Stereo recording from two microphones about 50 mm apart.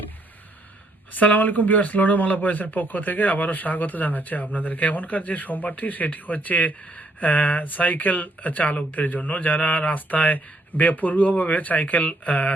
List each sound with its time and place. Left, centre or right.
1.1 s speech: left